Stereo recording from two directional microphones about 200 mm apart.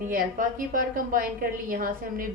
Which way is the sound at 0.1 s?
45° right (ahead or behind).